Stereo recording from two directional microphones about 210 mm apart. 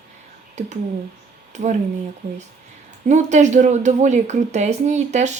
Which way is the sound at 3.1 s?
35° right (ahead or behind).